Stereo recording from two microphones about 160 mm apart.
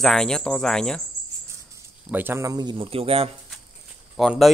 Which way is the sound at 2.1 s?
10° right (ahead or behind).